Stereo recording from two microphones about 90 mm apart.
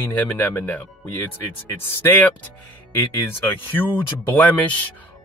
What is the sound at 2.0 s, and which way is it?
Speech, 20° left (ahead or behind).